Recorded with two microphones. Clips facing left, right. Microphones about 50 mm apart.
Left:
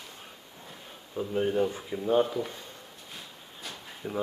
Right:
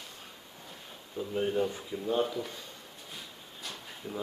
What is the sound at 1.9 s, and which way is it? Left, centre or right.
Speech, left.